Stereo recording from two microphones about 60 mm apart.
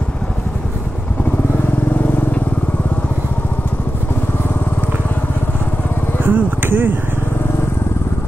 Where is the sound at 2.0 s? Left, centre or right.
Left.